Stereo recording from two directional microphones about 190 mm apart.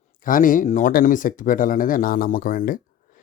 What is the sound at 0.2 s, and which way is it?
Speech, 45° left (ahead or behind).